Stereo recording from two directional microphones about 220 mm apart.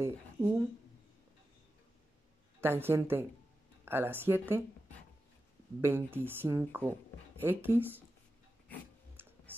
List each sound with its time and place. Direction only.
0.0 s speech: 10° right (ahead or behind)
2.6 s speech: 10° right (ahead or behind)
5.8 s speech: 10° right (ahead or behind)
9.2 s a sound: 10° right (ahead or behind)